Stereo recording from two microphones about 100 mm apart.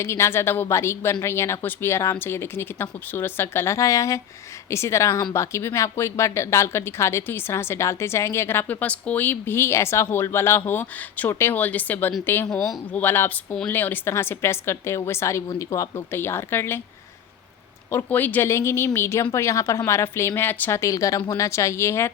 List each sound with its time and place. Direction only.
0.0 s speech: 25° left (ahead or behind)
17.9 s speech: 20° left (ahead or behind)